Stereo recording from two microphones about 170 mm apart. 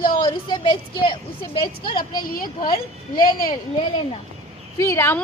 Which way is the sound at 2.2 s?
55° left (ahead or behind).